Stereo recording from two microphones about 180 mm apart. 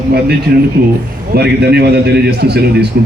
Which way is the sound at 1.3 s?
65° right (ahead or behind).